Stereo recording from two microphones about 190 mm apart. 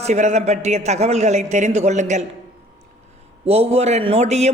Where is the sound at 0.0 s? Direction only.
35° right (ahead or behind).